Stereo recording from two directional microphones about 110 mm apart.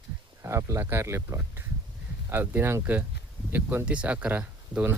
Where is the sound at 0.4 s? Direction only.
25° right (ahead or behind).